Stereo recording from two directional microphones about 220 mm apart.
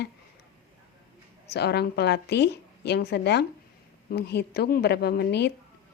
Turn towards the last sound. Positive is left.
turn(degrees=45)  # may be behind; listen again after turning